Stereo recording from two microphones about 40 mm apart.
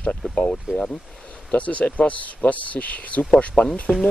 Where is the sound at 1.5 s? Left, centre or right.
Left.